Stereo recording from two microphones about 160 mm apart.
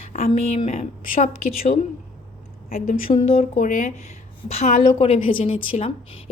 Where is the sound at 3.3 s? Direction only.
40° left (ahead or behind).